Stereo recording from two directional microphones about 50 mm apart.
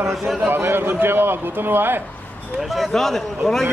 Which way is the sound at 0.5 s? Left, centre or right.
Right.